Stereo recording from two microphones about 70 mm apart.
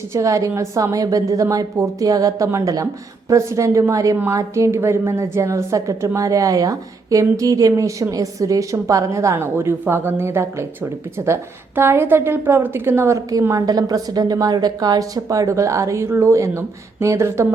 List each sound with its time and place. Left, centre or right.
0.1 s a woman's voice: right
13.5 s a woman's voice: right